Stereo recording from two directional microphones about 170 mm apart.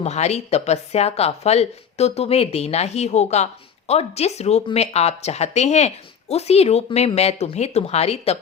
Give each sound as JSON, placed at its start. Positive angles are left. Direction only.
{"t": 0.0, "sound": "a woman's voice", "side_deg": 40}